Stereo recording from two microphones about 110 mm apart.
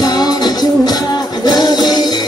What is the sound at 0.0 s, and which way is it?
Music, 35° left (ahead or behind).